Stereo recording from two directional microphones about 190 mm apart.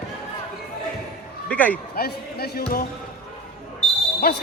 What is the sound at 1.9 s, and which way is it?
Speech, 55° left (ahead or behind).